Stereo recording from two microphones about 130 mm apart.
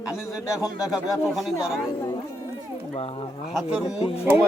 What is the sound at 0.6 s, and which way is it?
Speech, 25° left (ahead or behind).